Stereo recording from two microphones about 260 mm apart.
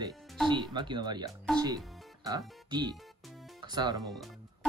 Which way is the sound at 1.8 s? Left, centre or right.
Centre.